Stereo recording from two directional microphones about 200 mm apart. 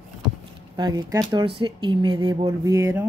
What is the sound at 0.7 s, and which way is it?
Speech, 20° right (ahead or behind).